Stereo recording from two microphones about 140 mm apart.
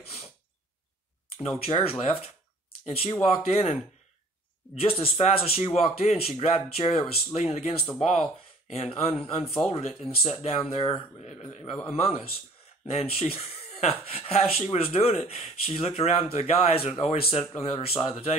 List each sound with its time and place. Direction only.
1.6 s speech: 45° left (ahead or behind)